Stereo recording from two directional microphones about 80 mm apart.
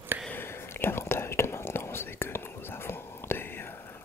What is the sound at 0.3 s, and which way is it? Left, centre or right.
Whispering, left.